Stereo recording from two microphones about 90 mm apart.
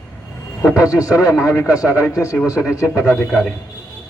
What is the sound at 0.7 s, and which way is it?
A man's voice, 40° left (ahead or behind).